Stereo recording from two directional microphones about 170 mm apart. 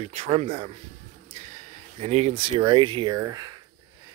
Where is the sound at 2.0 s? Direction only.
40° right (ahead or behind).